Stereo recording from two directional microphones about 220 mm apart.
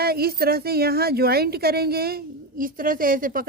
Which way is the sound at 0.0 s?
45° right (ahead or behind).